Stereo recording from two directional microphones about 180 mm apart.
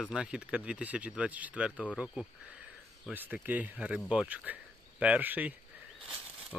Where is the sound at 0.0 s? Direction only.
5° right (ahead or behind).